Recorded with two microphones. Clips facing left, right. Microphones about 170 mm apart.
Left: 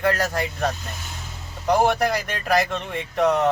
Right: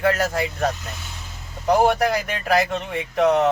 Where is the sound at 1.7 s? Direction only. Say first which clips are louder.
Right 2 dB; 5° right (ahead or behind).